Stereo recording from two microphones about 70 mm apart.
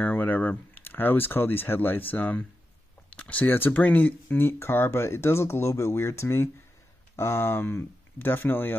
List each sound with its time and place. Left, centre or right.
0.0 s speech: left
4.5 s speech: left